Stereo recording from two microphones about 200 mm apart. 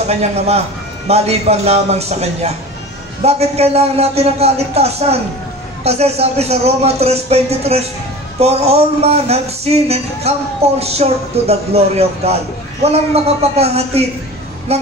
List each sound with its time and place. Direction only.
0.0 s a man's voice: 30° right (ahead or behind)